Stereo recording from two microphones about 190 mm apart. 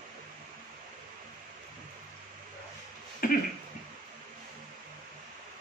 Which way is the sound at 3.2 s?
50° left (ahead or behind).